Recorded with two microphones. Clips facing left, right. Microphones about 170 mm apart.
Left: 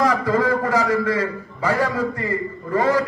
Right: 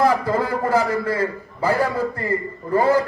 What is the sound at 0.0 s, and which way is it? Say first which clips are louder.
A man's voice: even; 30° right (ahead or behind).